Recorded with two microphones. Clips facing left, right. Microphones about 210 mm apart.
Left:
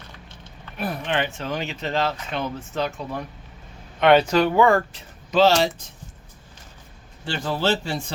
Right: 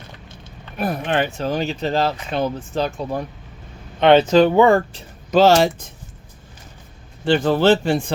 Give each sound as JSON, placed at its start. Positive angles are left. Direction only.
{"t": 0.8, "sound": "speech", "side_deg": -45}
{"t": 5.3, "sound": "a man's voice", "side_deg": -45}
{"t": 7.3, "sound": "a man's voice", "side_deg": -55}